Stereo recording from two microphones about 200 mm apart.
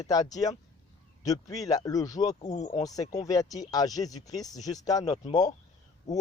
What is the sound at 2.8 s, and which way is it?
Speech, 20° left (ahead or behind).